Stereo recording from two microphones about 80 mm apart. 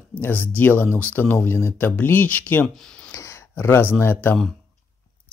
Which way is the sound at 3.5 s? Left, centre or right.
Left.